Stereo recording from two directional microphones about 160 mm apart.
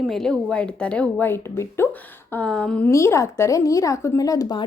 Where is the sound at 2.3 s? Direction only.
10° left (ahead or behind).